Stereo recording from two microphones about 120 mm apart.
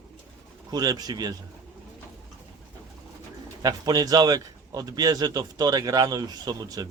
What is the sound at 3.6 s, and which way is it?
A man's voice, 35° right (ahead or behind).